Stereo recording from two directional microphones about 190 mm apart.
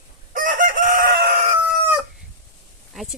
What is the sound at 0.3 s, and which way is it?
Chicken, 45° right (ahead or behind).